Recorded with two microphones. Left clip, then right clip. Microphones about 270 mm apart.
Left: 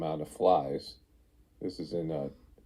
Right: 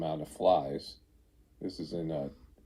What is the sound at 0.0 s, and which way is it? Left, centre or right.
Speech, left.